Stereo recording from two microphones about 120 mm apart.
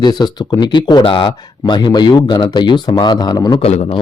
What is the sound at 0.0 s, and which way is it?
Speech, 35° left (ahead or behind).